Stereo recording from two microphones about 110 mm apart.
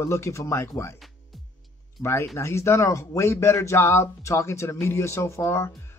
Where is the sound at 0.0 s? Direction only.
25° left (ahead or behind).